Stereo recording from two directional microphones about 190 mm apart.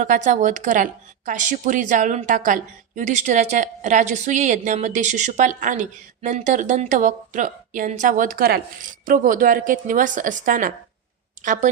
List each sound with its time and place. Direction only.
0.0 s a woman's voice: 40° right (ahead or behind)